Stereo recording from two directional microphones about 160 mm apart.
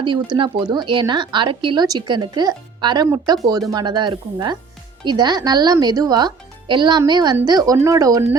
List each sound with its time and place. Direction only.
0.0 s speech: 30° right (ahead or behind)